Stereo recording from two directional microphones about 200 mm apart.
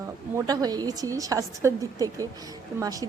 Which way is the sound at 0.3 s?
20° right (ahead or behind).